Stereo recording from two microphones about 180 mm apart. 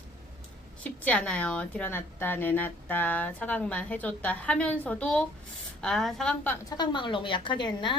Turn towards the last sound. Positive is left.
turn(degrees=25)  # may be behind; listen again after turning